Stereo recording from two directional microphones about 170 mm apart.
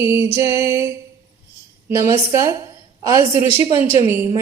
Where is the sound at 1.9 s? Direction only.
15° right (ahead or behind).